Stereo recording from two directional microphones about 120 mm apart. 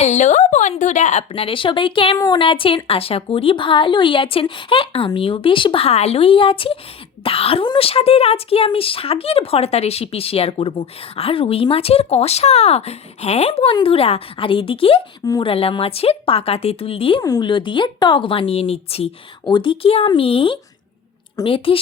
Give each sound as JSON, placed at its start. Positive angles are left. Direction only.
{"t": 0.0, "sound": "a sound", "side_deg": 75}
{"t": 0.8, "sound": "a woman's voice", "side_deg": 80}
{"t": 1.3, "sound": "a woman's voice", "side_deg": 50}
{"t": 2.1, "sound": "speech", "side_deg": 30}
{"t": 2.4, "sound": "a woman's voice", "side_deg": 50}
{"t": 13.5, "sound": "a woman's voice", "side_deg": 45}
{"t": 17.2, "sound": "a woman's voice", "side_deg": 30}
{"t": 19.5, "sound": "a woman's voice", "side_deg": 40}